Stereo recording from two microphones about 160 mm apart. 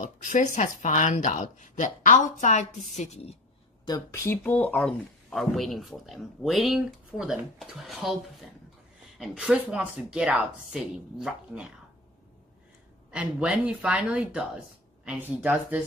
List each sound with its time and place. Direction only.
0.0 s a woman's voice: 55° left (ahead or behind)
3.8 s speech: 20° left (ahead or behind); by 8.2 s centre (ahead or behind)
9.2 s speech: centre (ahead or behind)
13.1 s speech: 10° right (ahead or behind)